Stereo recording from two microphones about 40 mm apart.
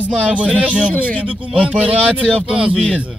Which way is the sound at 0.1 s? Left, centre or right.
Right.